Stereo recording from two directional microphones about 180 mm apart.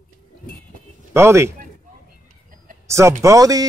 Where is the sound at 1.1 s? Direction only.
15° right (ahead or behind).